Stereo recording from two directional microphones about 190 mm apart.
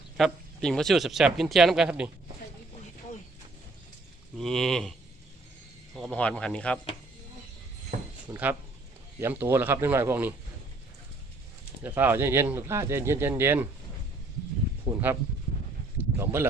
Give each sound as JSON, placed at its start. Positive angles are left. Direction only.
{"t": 0.2, "sound": "speech", "side_deg": 0}
{"t": 4.4, "sound": "speech", "side_deg": 0}
{"t": 7.9, "sound": "a sound", "side_deg": -40}
{"t": 8.3, "sound": "speech", "side_deg": -10}
{"t": 11.8, "sound": "speech", "side_deg": -10}
{"t": 14.9, "sound": "speech", "side_deg": -10}
{"t": 16.1, "sound": "speech", "side_deg": -15}